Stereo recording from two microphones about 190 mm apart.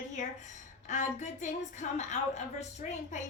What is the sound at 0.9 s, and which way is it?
A woman's voice, 40° left (ahead or behind).